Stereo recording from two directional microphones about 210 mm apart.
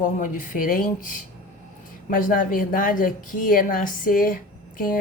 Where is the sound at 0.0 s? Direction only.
40° left (ahead or behind).